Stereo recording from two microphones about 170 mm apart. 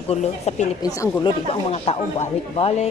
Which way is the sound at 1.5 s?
40° left (ahead or behind).